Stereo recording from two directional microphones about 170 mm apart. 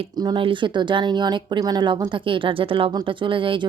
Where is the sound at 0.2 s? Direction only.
25° right (ahead or behind).